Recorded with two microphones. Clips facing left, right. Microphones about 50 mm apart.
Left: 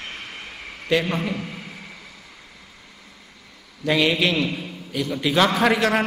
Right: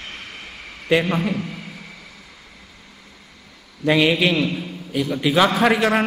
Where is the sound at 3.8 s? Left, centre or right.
Centre.